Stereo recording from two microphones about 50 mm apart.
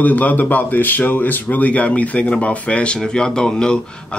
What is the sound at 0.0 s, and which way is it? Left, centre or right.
Speech, left.